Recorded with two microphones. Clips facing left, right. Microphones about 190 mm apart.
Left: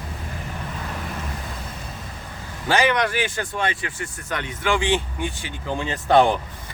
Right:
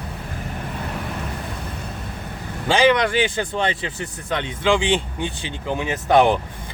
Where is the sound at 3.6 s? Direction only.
25° right (ahead or behind).